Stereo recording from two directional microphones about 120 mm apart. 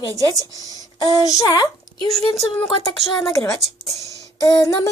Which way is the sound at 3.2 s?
25° left (ahead or behind).